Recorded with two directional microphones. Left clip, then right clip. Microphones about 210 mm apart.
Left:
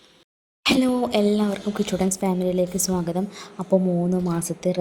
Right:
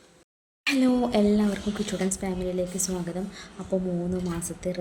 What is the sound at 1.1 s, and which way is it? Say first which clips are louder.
A woman's voice: left 3 dB; 25° left (ahead or behind).